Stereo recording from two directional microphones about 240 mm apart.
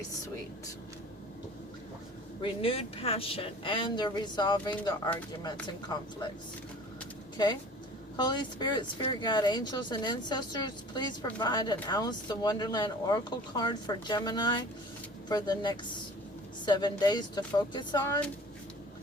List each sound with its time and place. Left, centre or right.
2.4 s speech: left
7.3 s speech: centre